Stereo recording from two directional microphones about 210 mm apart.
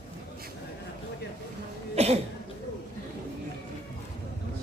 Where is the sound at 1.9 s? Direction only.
30° right (ahead or behind).